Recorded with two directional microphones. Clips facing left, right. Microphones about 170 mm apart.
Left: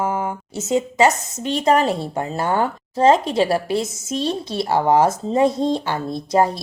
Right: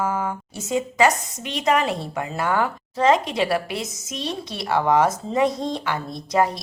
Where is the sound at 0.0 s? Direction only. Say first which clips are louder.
Left 2 dB; 20° left (ahead or behind).